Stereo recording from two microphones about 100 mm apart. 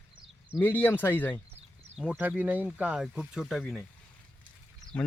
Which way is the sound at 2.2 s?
15° right (ahead or behind).